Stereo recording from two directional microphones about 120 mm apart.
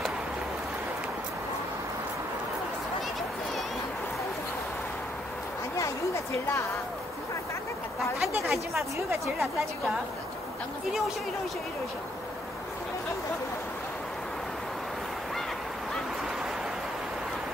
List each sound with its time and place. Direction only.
5.8 s speech: 25° left (ahead or behind)
8.4 s a woman's voice: centre (ahead or behind)